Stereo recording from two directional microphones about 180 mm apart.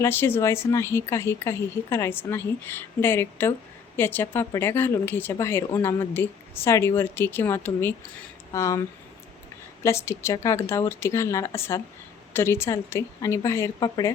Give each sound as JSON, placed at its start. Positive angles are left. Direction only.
{"t": 0.0, "sound": "speech", "side_deg": 10}
{"t": 9.8, "sound": "speech", "side_deg": 15}